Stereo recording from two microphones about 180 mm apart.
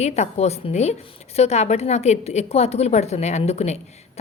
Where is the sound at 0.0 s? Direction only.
35° left (ahead or behind).